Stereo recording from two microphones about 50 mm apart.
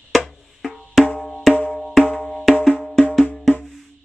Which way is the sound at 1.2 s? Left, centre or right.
Centre.